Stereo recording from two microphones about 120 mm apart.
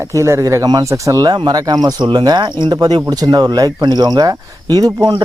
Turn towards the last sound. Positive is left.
turn(degrees=-30)  # may be behind; listen again after turning